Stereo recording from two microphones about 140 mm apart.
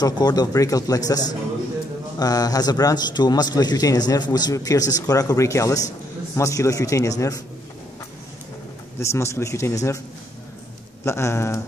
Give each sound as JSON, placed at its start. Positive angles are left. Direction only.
{"t": 0.0, "sound": "a man's voice", "side_deg": 30}
{"t": 9.0, "sound": "a man's voice", "side_deg": 20}
{"t": 11.1, "sound": "a man's voice", "side_deg": 20}